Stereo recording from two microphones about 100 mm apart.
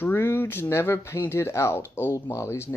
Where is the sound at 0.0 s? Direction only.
25° left (ahead or behind).